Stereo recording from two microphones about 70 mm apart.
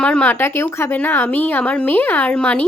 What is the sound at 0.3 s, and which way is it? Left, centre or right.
A woman's voice, left.